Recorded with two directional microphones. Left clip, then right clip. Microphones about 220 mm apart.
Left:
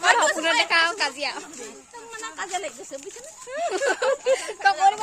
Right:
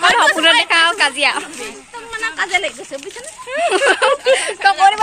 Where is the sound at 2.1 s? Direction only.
30° left (ahead or behind).